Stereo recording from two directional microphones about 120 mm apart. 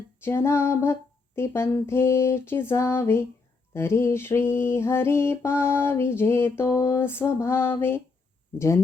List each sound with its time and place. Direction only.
0.2 s mantra: 20° left (ahead or behind)